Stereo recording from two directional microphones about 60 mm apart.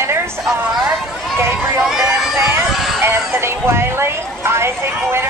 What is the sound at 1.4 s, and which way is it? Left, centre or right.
Run, right.